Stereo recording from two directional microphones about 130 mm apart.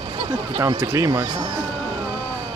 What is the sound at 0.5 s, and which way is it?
Speech, 25° right (ahead or behind).